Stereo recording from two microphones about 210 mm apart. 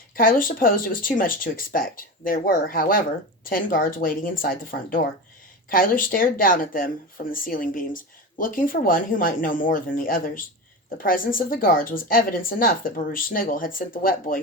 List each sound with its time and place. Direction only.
0.2 s speech: 40° left (ahead or behind)